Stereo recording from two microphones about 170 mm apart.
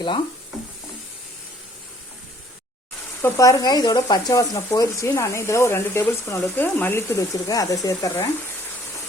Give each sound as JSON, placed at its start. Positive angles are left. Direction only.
{"t": 3.2, "sound": "speech", "side_deg": 15}